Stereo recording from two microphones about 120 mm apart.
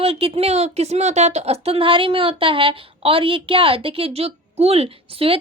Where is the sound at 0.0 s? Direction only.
50° right (ahead or behind).